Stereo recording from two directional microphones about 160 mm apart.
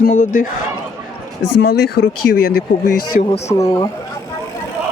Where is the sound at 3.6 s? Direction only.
20° left (ahead or behind).